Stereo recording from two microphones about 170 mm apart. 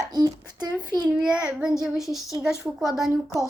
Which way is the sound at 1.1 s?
5° right (ahead or behind).